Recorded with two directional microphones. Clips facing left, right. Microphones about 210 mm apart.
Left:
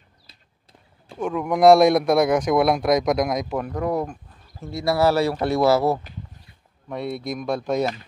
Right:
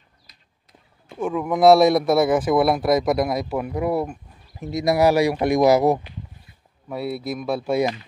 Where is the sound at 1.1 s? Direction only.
5° right (ahead or behind).